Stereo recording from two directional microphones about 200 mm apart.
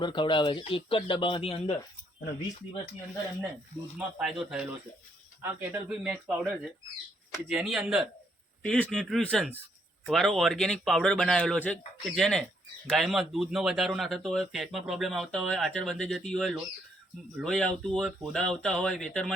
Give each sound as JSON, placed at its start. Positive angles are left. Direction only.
{"t": 0.0, "sound": "speech", "side_deg": 25}
{"t": 3.9, "sound": "speech", "side_deg": 0}